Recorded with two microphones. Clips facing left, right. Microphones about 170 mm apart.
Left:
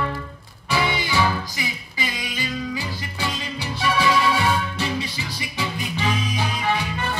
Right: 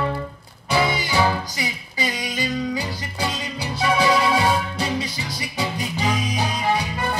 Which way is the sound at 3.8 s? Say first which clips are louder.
Right 2 dB; 35° right (ahead or behind).